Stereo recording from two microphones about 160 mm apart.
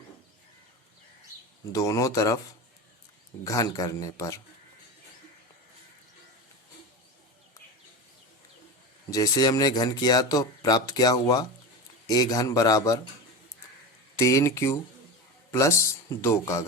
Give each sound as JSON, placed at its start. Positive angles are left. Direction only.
{"t": 1.7, "sound": "speech", "side_deg": 20}
{"t": 3.4, "sound": "speech", "side_deg": 20}
{"t": 9.0, "sound": "speech", "side_deg": 20}
{"t": 14.2, "sound": "speech", "side_deg": 20}